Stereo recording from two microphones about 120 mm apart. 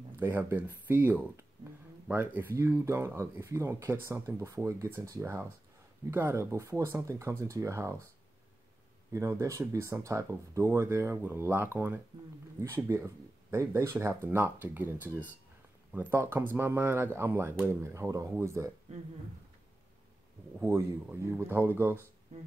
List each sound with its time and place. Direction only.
0.2 s speech: 15° right (ahead or behind)
9.1 s speech: 25° right (ahead or behind)
20.6 s speech: 20° right (ahead or behind)
22.3 s speech: 65° right (ahead or behind)